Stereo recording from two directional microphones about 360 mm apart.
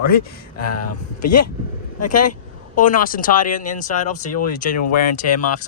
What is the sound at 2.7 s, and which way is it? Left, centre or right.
Speech, left.